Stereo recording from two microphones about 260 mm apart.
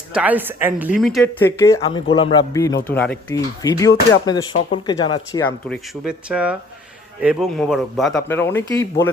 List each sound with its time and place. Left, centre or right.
0.1 s speech: centre